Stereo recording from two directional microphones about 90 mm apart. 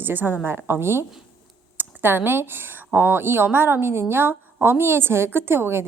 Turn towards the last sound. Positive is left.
turn(degrees=-25)  # may be behind; listen again after turning